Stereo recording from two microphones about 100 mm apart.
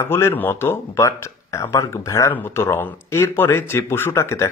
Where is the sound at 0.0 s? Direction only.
25° left (ahead or behind).